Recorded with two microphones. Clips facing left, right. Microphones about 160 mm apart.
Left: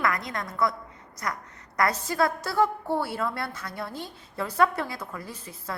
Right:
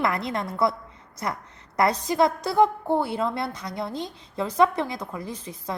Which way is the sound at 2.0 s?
20° right (ahead or behind).